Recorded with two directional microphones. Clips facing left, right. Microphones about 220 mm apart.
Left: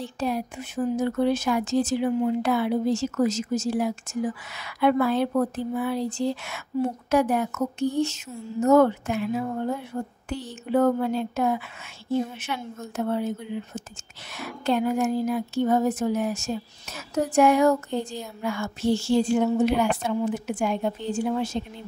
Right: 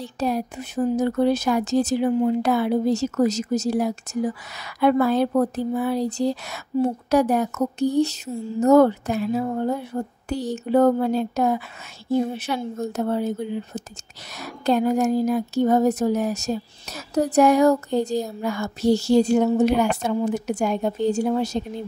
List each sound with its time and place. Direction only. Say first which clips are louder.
0.0 s speech: right 3 dB; 40° right (ahead or behind)